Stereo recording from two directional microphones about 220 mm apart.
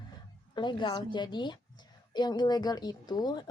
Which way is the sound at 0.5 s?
20° left (ahead or behind).